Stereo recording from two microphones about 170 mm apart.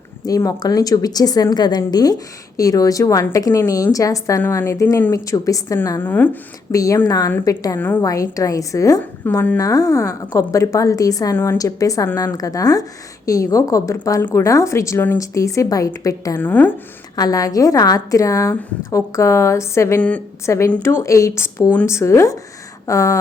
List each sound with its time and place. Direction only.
0.3 s a woman's voice: 20° left (ahead or behind)